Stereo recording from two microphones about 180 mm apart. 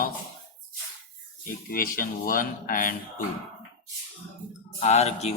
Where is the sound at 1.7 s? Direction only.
50° left (ahead or behind).